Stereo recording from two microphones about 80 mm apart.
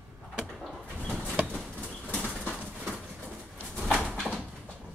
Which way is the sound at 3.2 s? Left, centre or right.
Centre.